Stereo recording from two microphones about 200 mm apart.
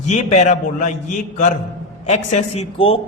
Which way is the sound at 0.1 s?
30° left (ahead or behind).